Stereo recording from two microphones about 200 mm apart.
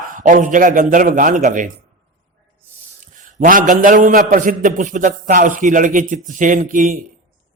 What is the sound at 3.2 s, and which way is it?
A man's voice, 40° right (ahead or behind).